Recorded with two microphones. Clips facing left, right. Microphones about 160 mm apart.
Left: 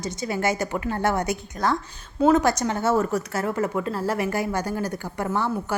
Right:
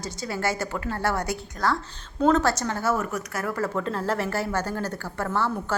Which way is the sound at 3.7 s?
5° left (ahead or behind).